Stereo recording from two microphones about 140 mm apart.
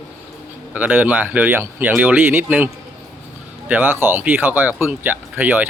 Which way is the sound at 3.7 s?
15° right (ahead or behind).